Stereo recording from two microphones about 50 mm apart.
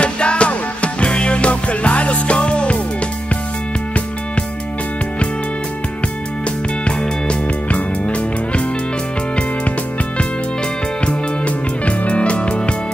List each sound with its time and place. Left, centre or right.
0.0 s music: left
6.8 s music: left
11.1 s music: left